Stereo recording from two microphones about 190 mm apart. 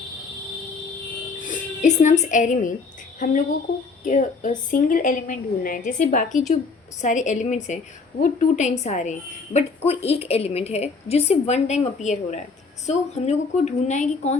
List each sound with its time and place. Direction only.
1.4 s a woman's voice: 40° left (ahead or behind)